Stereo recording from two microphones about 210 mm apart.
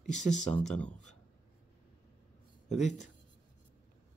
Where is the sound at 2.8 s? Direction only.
35° left (ahead or behind).